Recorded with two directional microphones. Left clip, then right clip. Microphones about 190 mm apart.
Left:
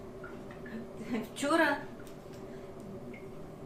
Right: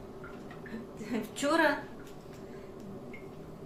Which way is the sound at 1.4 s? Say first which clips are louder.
Right 1 dB; 10° right (ahead or behind).